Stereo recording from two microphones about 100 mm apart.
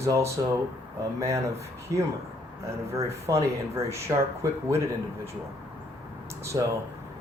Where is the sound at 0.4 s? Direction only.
40° right (ahead or behind).